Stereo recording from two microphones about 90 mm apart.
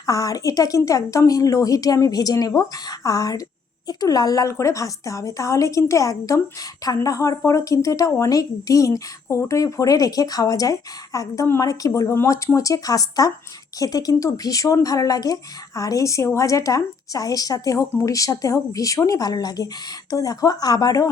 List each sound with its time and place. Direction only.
0.0 s a woman's voice: 40° left (ahead or behind)
11.9 s a woman's voice: 30° left (ahead or behind); by 21.1 s 45° left (ahead or behind)